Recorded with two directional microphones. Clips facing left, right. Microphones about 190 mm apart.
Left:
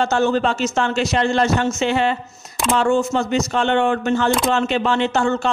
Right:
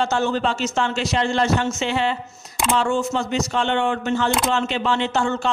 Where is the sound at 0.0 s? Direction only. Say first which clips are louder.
Left 3 dB; 50° left (ahead or behind).